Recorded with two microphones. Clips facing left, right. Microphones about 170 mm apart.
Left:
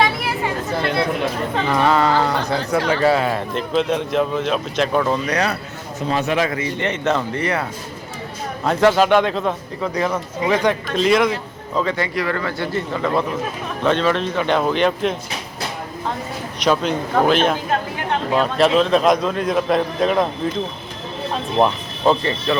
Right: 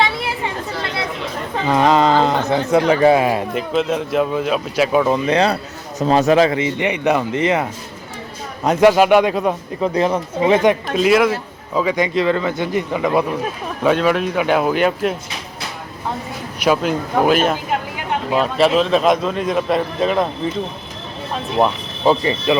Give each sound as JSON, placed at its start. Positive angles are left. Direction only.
{"t": 1.6, "sound": "speech", "side_deg": -20}
{"t": 5.1, "sound": "a man's voice", "side_deg": -25}
{"t": 6.0, "sound": "a man's voice", "side_deg": -40}
{"t": 9.9, "sound": "a man's voice", "side_deg": -25}
{"t": 10.9, "sound": "speech", "side_deg": -5}
{"t": 16.6, "sound": "speech", "side_deg": -5}